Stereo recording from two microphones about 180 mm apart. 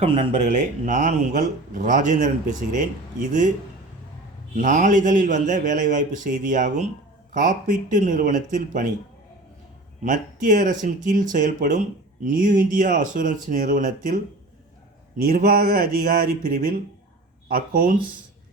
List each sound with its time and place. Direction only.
0.0 s speech: 35° right (ahead or behind)
4.5 s speech: 45° right (ahead or behind)
10.0 s speech: 45° right (ahead or behind)
15.2 s speech: 55° right (ahead or behind)